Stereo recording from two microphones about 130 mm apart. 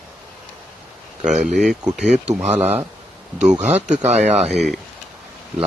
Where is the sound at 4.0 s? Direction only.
60° right (ahead or behind).